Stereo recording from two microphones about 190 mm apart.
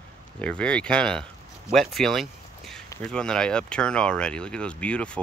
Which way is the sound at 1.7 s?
Centre (ahead or behind).